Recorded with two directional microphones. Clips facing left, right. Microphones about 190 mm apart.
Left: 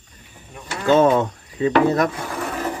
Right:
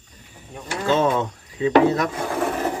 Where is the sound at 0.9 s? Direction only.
50° left (ahead or behind).